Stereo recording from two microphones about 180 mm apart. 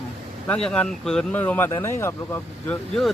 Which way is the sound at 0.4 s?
5° left (ahead or behind).